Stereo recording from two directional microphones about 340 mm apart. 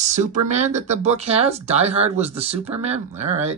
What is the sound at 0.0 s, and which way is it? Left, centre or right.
Speech, right.